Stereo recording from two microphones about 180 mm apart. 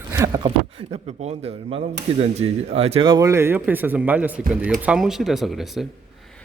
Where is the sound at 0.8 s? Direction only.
35° right (ahead or behind); by 5.9 s centre (ahead or behind).